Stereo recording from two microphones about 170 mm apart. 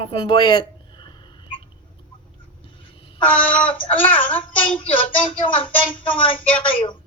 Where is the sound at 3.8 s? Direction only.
10° left (ahead or behind).